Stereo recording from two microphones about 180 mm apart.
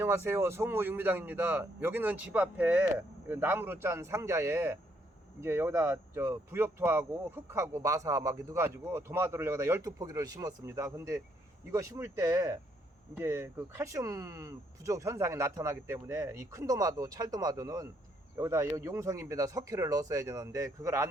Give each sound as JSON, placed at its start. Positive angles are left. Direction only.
{"t": 0.3, "sound": "speech", "side_deg": -15}